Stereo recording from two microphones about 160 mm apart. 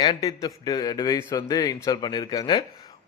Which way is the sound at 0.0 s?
25° left (ahead or behind).